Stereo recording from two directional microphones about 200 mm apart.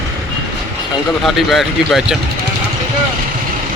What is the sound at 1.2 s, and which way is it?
Speech, centre (ahead or behind).